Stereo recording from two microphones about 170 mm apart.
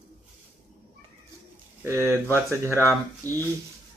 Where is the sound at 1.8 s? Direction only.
15° right (ahead or behind).